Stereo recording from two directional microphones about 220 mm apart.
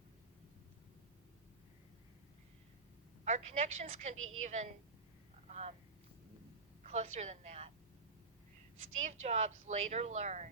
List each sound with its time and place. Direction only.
3.2 s a woman's voice: 30° right (ahead or behind)
5.5 s vehicle: 30° right (ahead or behind)
6.8 s a woman's voice: 30° right (ahead or behind)
9.0 s a woman's voice: 30° right (ahead or behind)